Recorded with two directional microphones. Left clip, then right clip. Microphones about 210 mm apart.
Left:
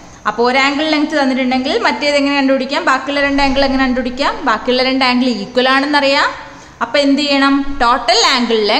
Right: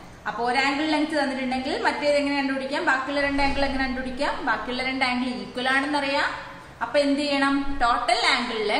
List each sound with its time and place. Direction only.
0.2 s a woman's voice: 50° left (ahead or behind)